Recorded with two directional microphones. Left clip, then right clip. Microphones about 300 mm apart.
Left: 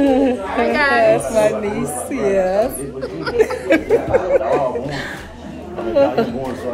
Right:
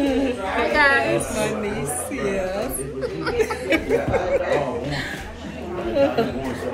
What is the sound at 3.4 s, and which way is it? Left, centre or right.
Chuckle, left.